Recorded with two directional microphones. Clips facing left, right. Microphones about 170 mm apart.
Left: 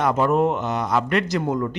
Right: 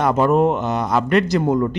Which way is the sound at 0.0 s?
40° right (ahead or behind).